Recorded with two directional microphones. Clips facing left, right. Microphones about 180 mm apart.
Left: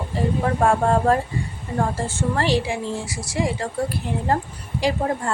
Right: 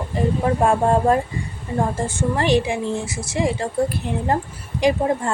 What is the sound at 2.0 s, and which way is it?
A woman's voice, 15° right (ahead or behind).